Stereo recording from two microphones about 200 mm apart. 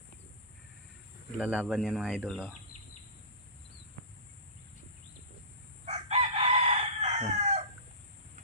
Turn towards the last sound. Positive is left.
turn(degrees=-35)  # may be behind; listen again after turning